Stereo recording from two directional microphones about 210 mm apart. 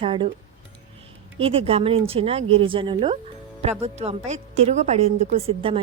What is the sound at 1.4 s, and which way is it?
Speech, 25° right (ahead or behind).